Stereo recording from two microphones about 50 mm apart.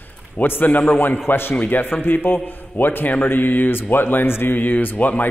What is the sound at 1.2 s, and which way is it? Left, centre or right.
A man's voice, left.